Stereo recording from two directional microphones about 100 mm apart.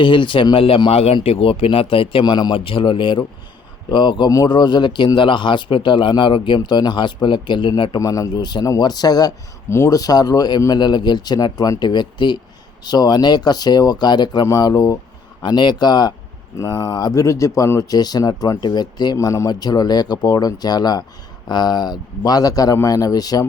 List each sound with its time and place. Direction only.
0.0 s speech: 55° left (ahead or behind)
0.5 s speech: 70° left (ahead or behind)
0.9 s speech: 85° left; by 2.2 s 70° left (ahead or behind)
2.2 s a man's voice: 50° left (ahead or behind)
7.9 s speech: 35° left (ahead or behind)
9.6 s speech: 25° left (ahead or behind)
9.9 s a man's voice: 40° left (ahead or behind)
16.6 s speech: 30° left (ahead or behind)